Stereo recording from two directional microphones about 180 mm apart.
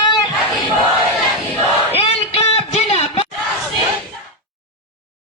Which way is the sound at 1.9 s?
35° left (ahead or behind).